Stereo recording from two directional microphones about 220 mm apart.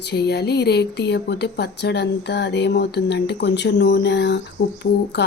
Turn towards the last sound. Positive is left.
turn(degrees=50)  # may be behind; listen again after turning